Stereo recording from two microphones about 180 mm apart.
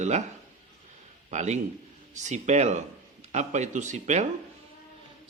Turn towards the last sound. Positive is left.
turn(degrees=-40)  # may be behind; listen again after turning